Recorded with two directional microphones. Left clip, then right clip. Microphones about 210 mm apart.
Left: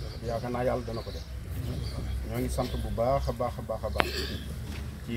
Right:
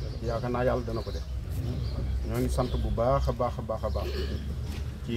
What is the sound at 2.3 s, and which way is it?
Speech, centre (ahead or behind).